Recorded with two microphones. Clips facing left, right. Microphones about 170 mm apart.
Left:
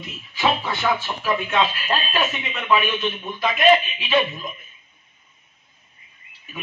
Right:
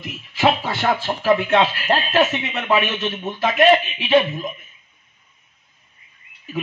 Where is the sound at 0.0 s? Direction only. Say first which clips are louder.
Right 4 dB; 75° right (ahead or behind).